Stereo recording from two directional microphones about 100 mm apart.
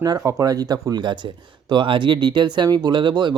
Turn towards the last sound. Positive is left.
turn(degrees=-50)  # may be behind; listen again after turning